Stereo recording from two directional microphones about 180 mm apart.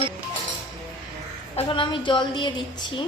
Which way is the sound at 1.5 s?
30° left (ahead or behind).